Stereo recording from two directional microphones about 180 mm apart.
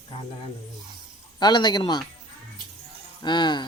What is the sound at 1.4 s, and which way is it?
Speech, 25° left (ahead or behind).